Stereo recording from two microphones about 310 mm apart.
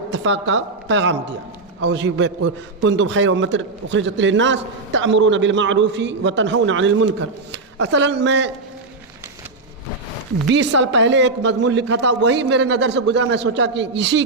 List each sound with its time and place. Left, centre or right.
0.1 s a woman's voice: right
10.8 s a man's voice: right